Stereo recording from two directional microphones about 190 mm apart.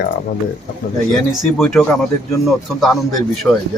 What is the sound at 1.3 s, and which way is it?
A man's voice, centre (ahead or behind).